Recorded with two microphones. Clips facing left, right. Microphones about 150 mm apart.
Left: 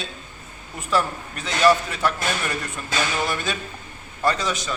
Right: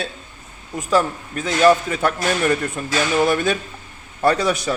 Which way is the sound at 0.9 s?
45° right (ahead or behind).